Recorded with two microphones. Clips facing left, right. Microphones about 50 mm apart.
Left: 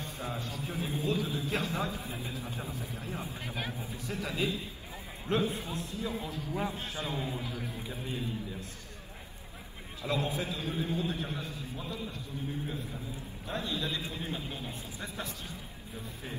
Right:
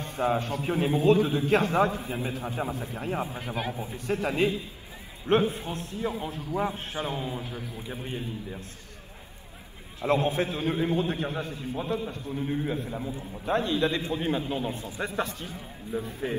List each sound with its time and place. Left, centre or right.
0.0 s a man's voice: right
3.9 s a man's voice: right
10.0 s a man's voice: right
12.4 s a man's voice: right
14.7 s a man's voice: right